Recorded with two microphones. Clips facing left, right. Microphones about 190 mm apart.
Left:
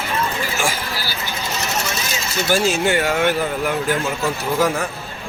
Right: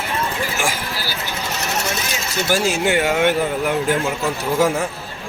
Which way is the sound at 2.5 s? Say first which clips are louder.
Left 1 dB; 10° right (ahead or behind).